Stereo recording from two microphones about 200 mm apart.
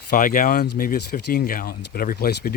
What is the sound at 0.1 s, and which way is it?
Speech, 45° left (ahead or behind).